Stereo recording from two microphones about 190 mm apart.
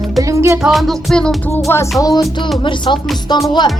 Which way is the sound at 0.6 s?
Centre (ahead or behind).